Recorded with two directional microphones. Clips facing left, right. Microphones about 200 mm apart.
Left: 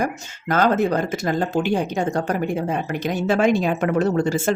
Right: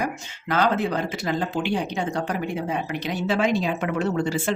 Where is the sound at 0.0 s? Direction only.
45° left (ahead or behind).